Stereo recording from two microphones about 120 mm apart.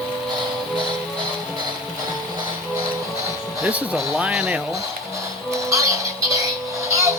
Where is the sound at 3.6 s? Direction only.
10° right (ahead or behind).